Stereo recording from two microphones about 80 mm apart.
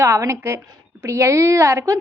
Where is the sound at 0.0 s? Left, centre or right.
Right.